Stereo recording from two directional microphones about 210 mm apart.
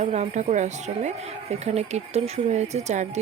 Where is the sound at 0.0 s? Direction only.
35° right (ahead or behind).